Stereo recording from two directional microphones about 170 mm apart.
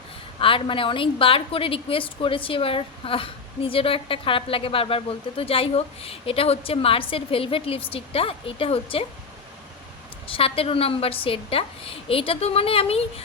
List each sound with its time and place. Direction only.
0.3 s a woman's voice: 30° left (ahead or behind)
10.2 s a woman's voice: 35° left (ahead or behind)